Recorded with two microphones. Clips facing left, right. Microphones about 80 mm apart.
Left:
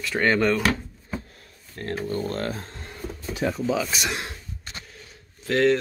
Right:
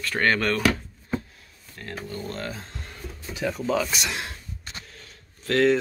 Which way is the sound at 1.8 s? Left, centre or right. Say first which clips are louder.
Left 6 dB; left.